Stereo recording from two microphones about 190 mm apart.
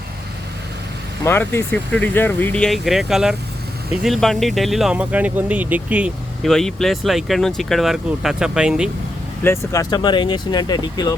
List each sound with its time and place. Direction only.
1.2 s speech: 10° left (ahead or behind); by 8.9 s 5° right (ahead or behind)
9.4 s speech: 15° left (ahead or behind)